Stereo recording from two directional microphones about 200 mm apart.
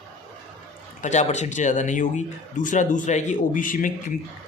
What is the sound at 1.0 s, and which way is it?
Speech, 35° left (ahead or behind).